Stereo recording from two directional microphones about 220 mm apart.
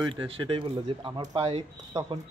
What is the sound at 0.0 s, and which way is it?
A man's voice, 20° right (ahead or behind).